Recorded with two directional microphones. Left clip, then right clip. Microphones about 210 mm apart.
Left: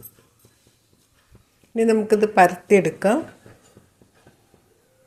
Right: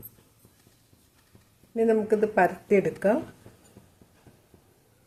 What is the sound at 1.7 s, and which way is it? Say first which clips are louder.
Speech: left 5 dB; 35° left (ahead or behind).